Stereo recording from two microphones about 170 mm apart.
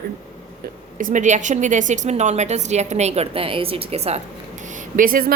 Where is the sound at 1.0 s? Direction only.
50° right (ahead or behind).